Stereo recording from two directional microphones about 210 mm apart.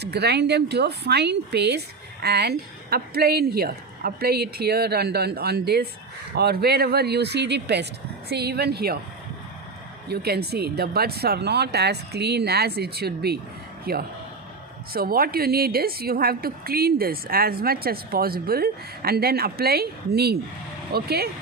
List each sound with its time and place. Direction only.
0.0 s a woman's voice: 50° right (ahead or behind)
10.1 s a woman's voice: 50° right (ahead or behind)